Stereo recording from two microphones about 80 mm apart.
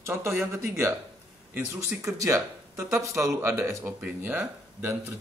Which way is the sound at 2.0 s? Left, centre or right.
Right.